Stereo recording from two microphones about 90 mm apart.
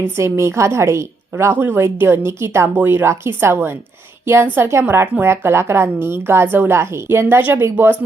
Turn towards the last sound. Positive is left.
turn(degrees=-25)  # may be behind; listen again after turning